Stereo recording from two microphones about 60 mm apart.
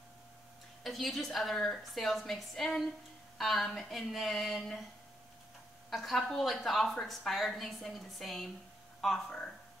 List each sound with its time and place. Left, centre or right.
0.8 s a woman's voice: centre
5.9 s a woman's voice: centre